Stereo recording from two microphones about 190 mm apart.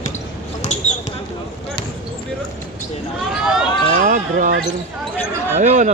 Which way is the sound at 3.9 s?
40° right (ahead or behind).